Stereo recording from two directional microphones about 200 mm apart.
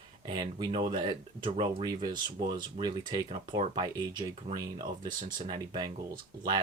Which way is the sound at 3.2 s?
30° right (ahead or behind).